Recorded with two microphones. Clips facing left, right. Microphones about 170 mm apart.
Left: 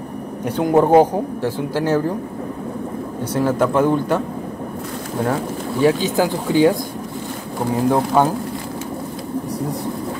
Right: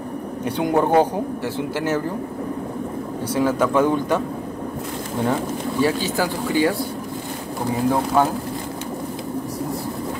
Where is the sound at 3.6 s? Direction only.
10° left (ahead or behind).